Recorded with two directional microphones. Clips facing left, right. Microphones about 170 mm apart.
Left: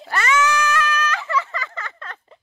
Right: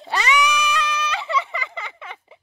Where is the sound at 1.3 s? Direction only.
15° right (ahead or behind).